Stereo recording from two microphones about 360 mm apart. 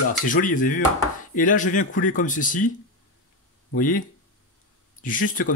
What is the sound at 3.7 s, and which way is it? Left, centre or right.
Speech, left.